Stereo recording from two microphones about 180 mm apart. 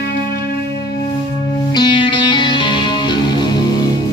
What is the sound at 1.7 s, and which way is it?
Music, 25° left (ahead or behind).